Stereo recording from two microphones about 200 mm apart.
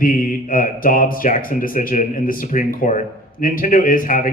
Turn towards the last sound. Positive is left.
turn(degrees=40)  # may be behind; listen again after turning